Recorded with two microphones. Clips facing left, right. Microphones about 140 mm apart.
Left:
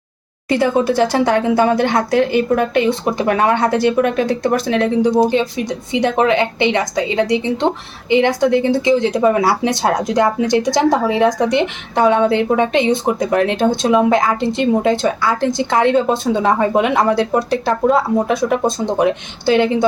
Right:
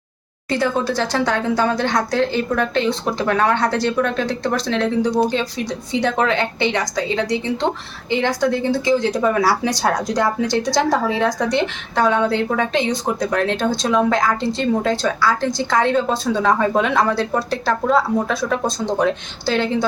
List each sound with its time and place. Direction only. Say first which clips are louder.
0.4 s speech: left 4 dB; 15° left (ahead or behind)
0.9 s a woman's voice: left 6 dB; 55° left (ahead or behind)
1.1 s speech: left 5 dB; 15° left (ahead or behind)